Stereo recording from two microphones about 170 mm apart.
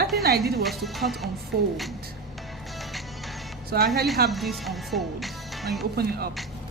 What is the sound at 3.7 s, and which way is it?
Speech, 70° right (ahead or behind).